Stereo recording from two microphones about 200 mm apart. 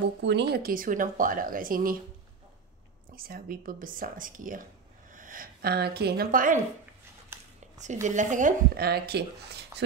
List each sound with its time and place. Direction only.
0.2 s speech: 60° right (ahead or behind)
3.2 s speech: 45° right (ahead or behind)
7.3 s a sound: 10° right (ahead or behind)
7.8 s speech: 35° right (ahead or behind); by 9.7 s 55° right (ahead or behind)